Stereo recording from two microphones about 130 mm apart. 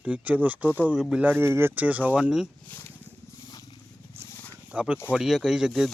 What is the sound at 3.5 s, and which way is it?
Wild animals, 35° left (ahead or behind).